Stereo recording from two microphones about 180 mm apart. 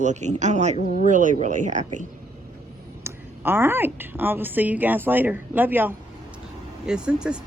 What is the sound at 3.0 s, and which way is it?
A woman's voice, 10° right (ahead or behind).